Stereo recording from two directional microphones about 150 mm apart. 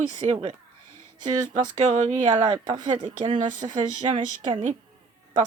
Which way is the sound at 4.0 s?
35° right (ahead or behind).